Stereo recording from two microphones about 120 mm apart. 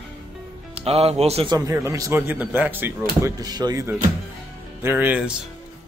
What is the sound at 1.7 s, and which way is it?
Speech, 25° right (ahead or behind).